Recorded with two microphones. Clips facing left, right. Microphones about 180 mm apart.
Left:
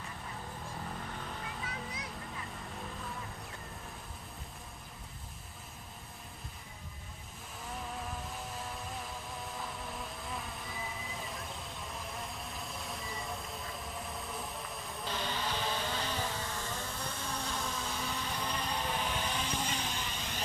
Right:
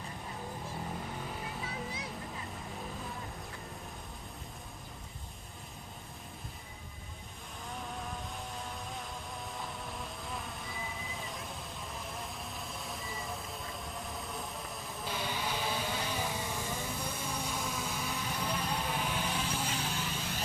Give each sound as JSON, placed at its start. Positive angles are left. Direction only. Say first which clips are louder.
{"t": 1.6, "sound": "music", "louder": "right 2 dB", "side_deg": -30}
{"t": 7.7, "sound": "vehicle", "louder": "even", "side_deg": 0}